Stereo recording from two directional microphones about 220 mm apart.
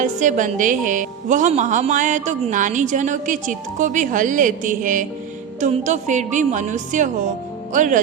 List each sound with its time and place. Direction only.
0.0 s a woman's voice: 35° right (ahead or behind)